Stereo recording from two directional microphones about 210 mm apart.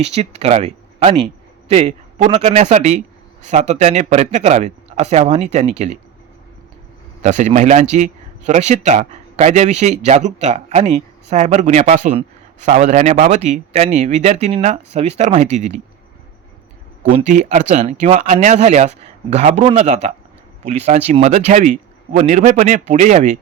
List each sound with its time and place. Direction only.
0.0 s a man's voice: 30° right (ahead or behind)
7.2 s a man's voice: 35° right (ahead or behind)
17.1 s a man's voice: 35° right (ahead or behind)